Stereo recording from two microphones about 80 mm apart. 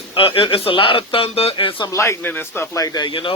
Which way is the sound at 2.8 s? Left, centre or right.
Left.